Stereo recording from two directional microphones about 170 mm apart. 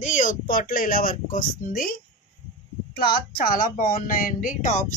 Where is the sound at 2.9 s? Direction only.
65° left (ahead or behind); by 4.8 s 50° left (ahead or behind).